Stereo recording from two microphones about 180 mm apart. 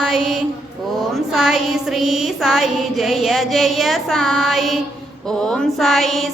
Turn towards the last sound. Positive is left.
turn(degrees=0)  # may be behind; listen again after turning